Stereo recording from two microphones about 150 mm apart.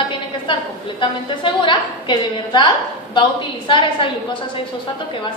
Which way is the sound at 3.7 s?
35° left (ahead or behind).